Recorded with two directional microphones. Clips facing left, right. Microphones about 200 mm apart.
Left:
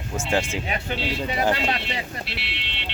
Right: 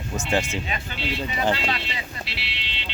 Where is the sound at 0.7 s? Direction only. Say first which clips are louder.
Left 3 dB; 55° left (ahead or behind).